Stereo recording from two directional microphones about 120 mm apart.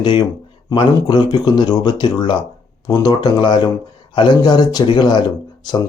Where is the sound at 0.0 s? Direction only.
40° left (ahead or behind).